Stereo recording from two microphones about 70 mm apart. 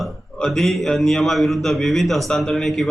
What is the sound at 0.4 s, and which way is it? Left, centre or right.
A man's voice, centre.